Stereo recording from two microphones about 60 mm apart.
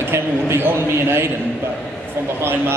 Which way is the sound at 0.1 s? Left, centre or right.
Right.